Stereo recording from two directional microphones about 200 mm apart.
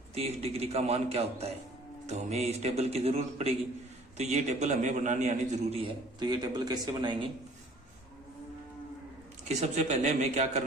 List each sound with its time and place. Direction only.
0.1 s a man's voice: 30° right (ahead or behind)
9.4 s a man's voice: 35° right (ahead or behind)